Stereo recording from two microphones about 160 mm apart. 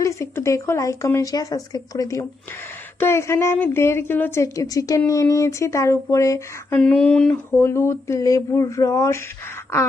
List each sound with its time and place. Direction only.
0.0 s a woman's voice: 20° left (ahead or behind)
6.7 s a woman's voice: 10° left (ahead or behind)